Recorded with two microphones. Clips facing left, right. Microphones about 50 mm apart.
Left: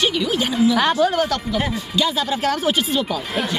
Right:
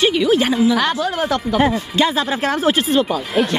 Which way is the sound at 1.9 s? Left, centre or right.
Right.